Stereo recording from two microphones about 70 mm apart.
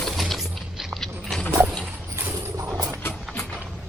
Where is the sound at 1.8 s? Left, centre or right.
Right.